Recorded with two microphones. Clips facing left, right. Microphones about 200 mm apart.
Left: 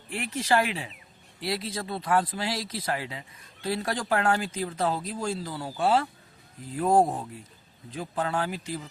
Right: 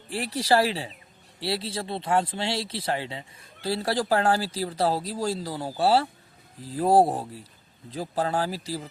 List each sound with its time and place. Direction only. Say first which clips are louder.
0.1 s speech: right 3 dB; 35° right (ahead or behind)